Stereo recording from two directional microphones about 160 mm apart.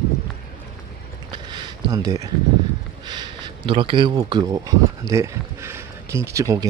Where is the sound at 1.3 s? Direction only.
30° right (ahead or behind).